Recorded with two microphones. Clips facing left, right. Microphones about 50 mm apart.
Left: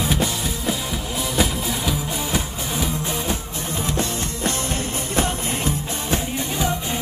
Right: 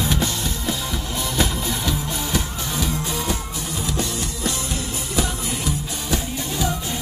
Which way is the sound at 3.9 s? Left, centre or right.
Left.